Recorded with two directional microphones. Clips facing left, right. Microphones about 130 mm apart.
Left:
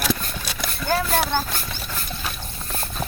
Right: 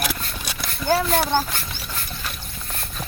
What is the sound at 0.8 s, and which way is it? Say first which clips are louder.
Speech: right 2 dB; 20° right (ahead or behind).